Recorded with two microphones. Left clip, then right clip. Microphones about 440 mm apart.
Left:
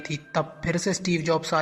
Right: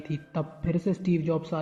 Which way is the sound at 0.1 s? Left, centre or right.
Left.